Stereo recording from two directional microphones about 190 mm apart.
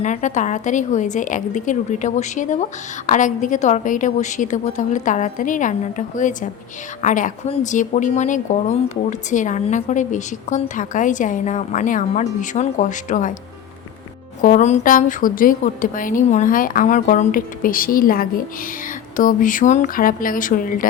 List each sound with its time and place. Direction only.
0.0 s speech: 40° left (ahead or behind)
14.4 s a woman's voice: 40° left (ahead or behind)